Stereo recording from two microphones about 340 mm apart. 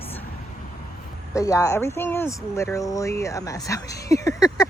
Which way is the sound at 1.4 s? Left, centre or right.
Centre.